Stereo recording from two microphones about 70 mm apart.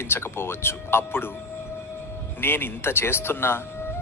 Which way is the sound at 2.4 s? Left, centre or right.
Left.